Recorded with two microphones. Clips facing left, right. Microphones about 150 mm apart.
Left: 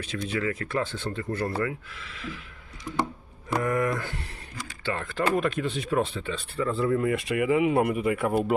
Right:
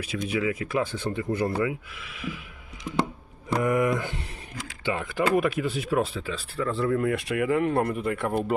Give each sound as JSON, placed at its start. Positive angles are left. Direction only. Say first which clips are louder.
{"t": 0.3, "sound": "speech", "louder": "right 2 dB", "side_deg": -10}
{"t": 3.6, "sound": "speech", "louder": "right 3 dB", "side_deg": -15}